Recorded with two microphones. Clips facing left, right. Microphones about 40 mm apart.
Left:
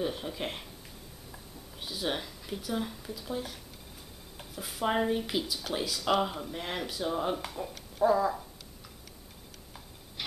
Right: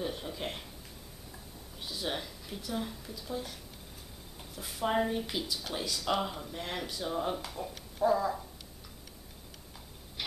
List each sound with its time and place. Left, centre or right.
0.0 s a sound: centre
1.8 s speech: centre
4.6 s speech: centre